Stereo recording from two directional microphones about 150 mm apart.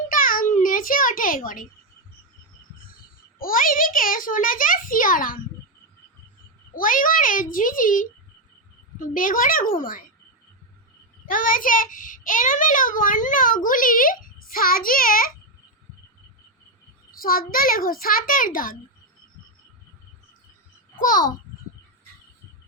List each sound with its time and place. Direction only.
0.1 s a sound: 70° left (ahead or behind)
3.3 s a child's voice: 70° left (ahead or behind)
6.7 s a child's voice: 65° left (ahead or behind)
11.3 s a child's voice: 65° left (ahead or behind)
17.1 s a child's voice: 75° left (ahead or behind)
21.0 s a child's voice: 70° left (ahead or behind)